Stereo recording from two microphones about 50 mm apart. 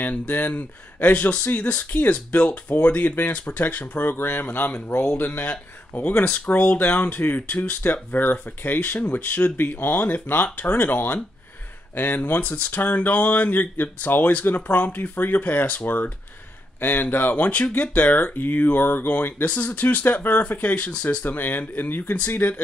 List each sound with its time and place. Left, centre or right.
0.3 s speech: left
12.2 s speech: left